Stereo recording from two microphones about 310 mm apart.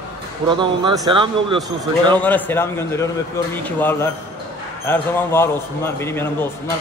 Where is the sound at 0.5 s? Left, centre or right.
Centre.